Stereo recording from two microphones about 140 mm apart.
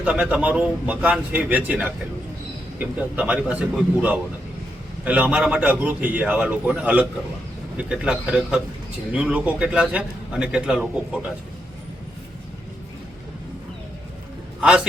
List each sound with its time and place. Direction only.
0.0 s a man's voice: 10° right (ahead or behind)
14.6 s a man's voice: 5° right (ahead or behind)